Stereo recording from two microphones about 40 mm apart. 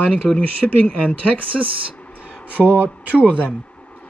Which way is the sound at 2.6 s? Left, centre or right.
Centre.